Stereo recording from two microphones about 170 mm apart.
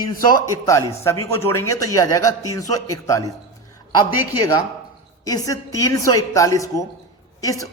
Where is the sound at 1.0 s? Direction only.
15° left (ahead or behind).